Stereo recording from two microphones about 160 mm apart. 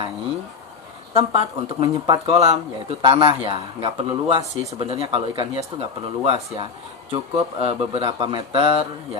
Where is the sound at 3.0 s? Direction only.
30° right (ahead or behind).